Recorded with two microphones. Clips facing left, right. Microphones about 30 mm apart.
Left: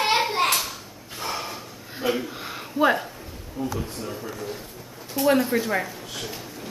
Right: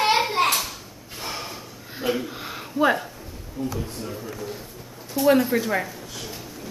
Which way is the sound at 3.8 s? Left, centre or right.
Left.